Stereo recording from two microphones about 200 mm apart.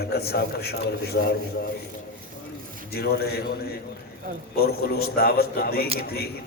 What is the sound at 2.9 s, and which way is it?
A man's voice, 55° left (ahead or behind).